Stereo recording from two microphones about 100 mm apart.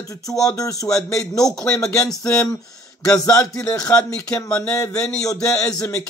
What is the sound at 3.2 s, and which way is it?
Speech, 35° left (ahead or behind).